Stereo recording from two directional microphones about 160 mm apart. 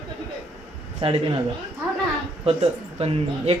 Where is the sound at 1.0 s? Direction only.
35° right (ahead or behind).